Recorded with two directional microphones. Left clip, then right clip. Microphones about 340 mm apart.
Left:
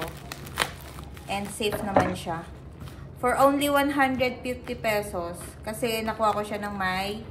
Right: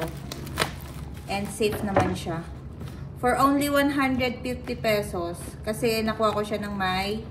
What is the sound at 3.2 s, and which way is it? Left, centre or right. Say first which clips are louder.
A woman's voice: left 1 dB; centre.